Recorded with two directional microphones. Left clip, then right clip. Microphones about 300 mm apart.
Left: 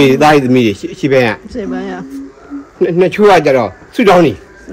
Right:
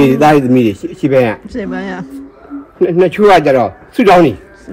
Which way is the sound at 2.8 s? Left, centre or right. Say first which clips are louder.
Even; centre.